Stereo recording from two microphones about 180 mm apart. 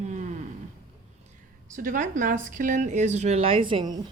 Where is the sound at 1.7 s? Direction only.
50° right (ahead or behind); by 4.0 s 25° right (ahead or behind).